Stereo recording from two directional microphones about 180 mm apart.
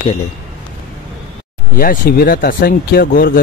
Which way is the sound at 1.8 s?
55° left (ahead or behind).